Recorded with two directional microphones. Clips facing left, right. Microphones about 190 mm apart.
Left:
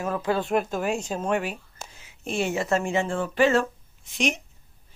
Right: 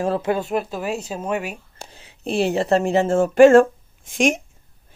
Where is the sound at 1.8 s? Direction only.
35° right (ahead or behind).